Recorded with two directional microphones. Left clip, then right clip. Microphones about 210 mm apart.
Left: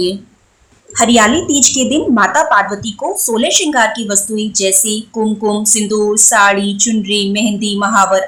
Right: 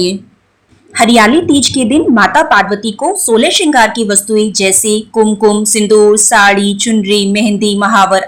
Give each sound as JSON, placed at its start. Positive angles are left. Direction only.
{"t": 0.9, "sound": "a woman's voice", "side_deg": -15}